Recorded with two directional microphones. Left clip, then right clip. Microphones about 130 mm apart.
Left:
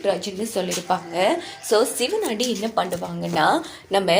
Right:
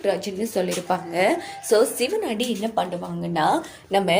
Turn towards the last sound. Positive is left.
turn(degrees=-10)  # may be behind; listen again after turning